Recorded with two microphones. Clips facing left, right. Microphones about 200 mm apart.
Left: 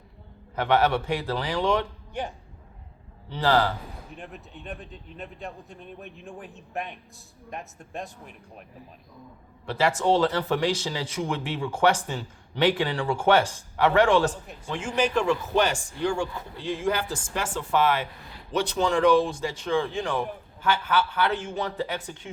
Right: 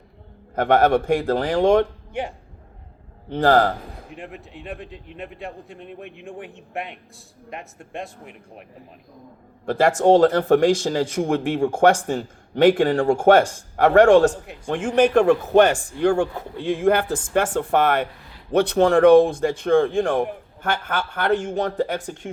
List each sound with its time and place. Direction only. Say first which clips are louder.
0.5 s speech: right 6 dB; 50° right (ahead or behind)
3.2 s speech: right 6 dB; 50° right (ahead or behind)
4.1 s a man's voice: right 5 dB; 90° right
8.2 s speech: right 4 dB; 70° right (ahead or behind)
9.6 s speech: right 7 dB; 50° right (ahead or behind)